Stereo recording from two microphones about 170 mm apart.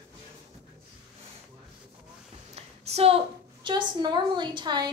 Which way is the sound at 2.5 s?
40° right (ahead or behind).